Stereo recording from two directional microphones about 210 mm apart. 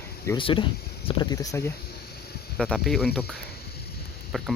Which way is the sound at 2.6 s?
Centre (ahead or behind).